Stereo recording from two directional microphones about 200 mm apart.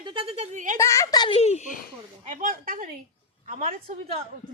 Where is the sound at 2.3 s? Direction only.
45° right (ahead or behind).